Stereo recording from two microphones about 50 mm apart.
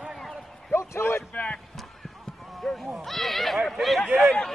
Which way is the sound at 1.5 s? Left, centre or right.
Centre.